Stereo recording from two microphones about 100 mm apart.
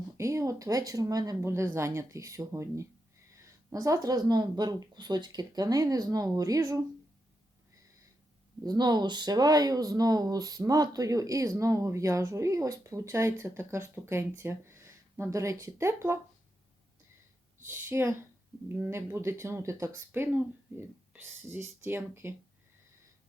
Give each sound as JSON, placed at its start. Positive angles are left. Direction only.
{"t": 0.2, "sound": "speech", "side_deg": -30}
{"t": 8.6, "sound": "speech", "side_deg": -45}
{"t": 17.7, "sound": "speech", "side_deg": -25}